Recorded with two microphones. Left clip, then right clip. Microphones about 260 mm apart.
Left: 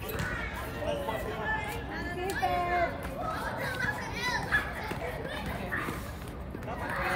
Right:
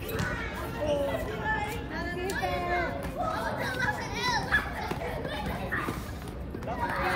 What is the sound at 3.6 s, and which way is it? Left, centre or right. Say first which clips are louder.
Children playing: right 2 dB; centre.